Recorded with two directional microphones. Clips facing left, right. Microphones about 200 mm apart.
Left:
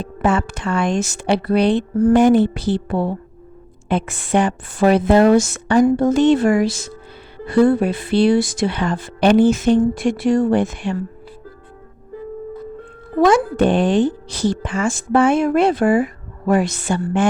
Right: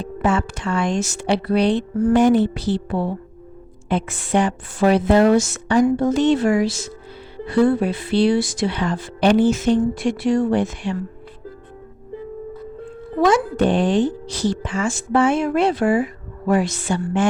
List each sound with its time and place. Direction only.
0.2 s speech: 55° left (ahead or behind)
2.0 s speech: 40° left (ahead or behind)
2.2 s speech: 55° left (ahead or behind)
13.2 s speech: 55° left (ahead or behind)